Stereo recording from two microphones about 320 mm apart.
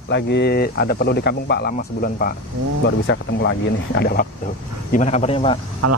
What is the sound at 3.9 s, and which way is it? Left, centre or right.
Speech, left.